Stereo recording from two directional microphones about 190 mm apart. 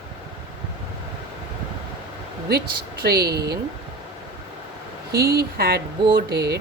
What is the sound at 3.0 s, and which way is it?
Speech, 55° right (ahead or behind).